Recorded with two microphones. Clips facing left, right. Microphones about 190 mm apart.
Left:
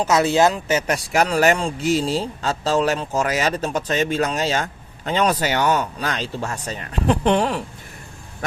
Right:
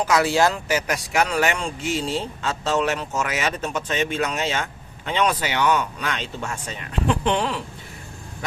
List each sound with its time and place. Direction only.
0.0 s speech: 25° left (ahead or behind); by 7.6 s 45° left (ahead or behind)